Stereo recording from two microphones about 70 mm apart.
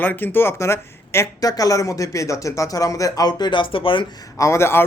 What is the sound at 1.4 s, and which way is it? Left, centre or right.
Speech, left.